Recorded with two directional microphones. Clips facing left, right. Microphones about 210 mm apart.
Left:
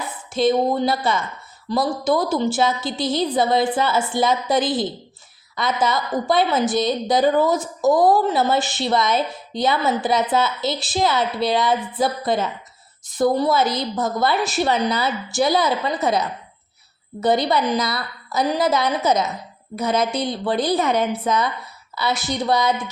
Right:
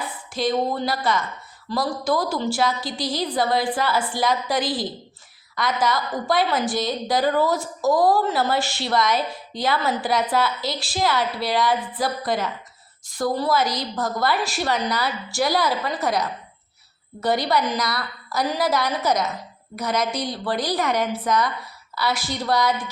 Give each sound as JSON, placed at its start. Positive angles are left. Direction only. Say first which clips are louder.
{"t": 0.3, "sound": "a woman's voice", "louder": "left 5 dB", "side_deg": 25}